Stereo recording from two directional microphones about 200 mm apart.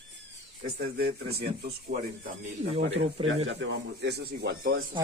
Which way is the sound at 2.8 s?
65° right (ahead or behind).